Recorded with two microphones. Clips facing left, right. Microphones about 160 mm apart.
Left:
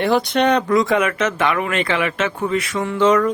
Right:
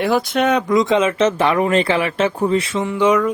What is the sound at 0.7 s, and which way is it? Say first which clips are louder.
Speech: right 1 dB; 20° right (ahead or behind).